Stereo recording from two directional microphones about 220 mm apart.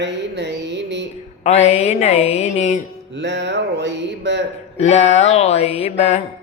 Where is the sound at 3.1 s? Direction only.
50° right (ahead or behind).